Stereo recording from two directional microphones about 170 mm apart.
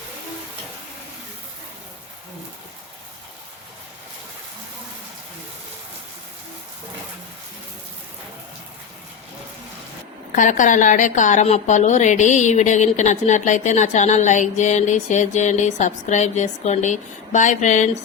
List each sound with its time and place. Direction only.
10.3 s a woman's voice: 50° left (ahead or behind)